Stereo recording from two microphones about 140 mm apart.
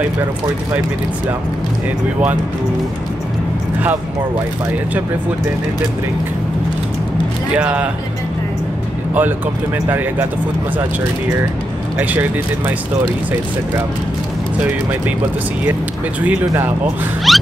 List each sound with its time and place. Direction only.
7.5 s speech: 10° right (ahead or behind)
9.8 s speech: 15° right (ahead or behind)
12.0 s speech: 15° right (ahead or behind)
16.3 s speech: 15° right (ahead or behind)
17.3 s a sound: centre (ahead or behind)